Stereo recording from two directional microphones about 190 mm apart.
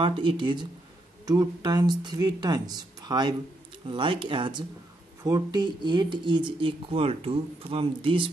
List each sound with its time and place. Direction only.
0.0 s speech: 25° right (ahead or behind)